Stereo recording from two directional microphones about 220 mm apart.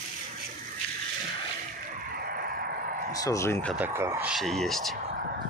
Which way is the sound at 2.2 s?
45° right (ahead or behind).